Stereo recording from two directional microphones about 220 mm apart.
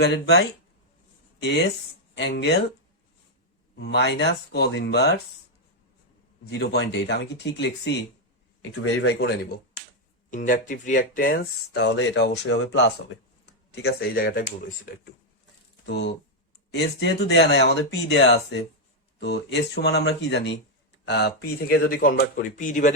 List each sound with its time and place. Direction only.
0.0 s speech: 50° left (ahead or behind)
3.8 s speech: 50° left (ahead or behind)
6.4 s speech: 50° left (ahead or behind)
10.3 s speech: 35° left (ahead or behind)
15.9 s speech: 50° left (ahead or behind); by 23.0 s 35° left (ahead or behind)